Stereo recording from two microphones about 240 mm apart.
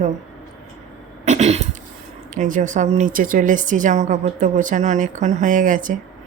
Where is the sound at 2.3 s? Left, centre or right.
Right.